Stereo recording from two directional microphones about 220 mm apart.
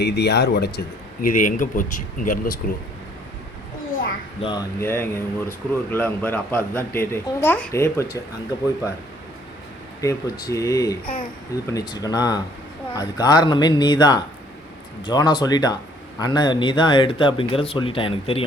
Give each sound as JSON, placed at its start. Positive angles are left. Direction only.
{"t": 0.0, "sound": "speech", "side_deg": 50}
{"t": 4.4, "sound": "speech", "side_deg": 20}
{"t": 4.8, "sound": "speech", "side_deg": 10}
{"t": 10.0, "sound": "speech", "side_deg": 15}